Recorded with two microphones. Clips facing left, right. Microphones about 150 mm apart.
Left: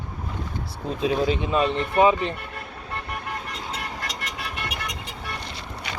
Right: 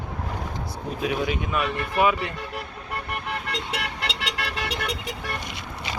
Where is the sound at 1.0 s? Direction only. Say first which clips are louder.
Left 4 dB; 30° left (ahead or behind).